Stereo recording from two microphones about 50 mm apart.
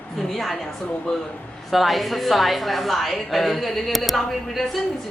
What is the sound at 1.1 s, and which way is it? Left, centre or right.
Speech, centre.